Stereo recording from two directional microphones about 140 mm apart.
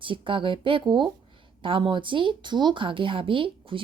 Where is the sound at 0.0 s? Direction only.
40° right (ahead or behind).